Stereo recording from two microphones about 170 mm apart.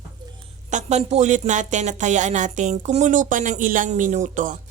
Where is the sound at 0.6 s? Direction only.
45° right (ahead or behind).